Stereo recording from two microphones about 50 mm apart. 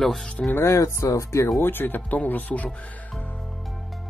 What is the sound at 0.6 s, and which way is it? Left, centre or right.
Speech, left.